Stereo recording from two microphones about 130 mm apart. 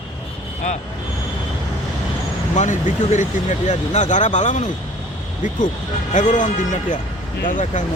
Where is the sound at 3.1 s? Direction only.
70° left (ahead or behind).